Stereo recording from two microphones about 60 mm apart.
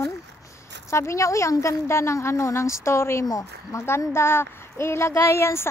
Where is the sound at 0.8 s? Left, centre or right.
Left.